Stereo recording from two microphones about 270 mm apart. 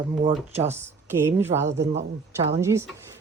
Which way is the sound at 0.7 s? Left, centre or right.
Centre.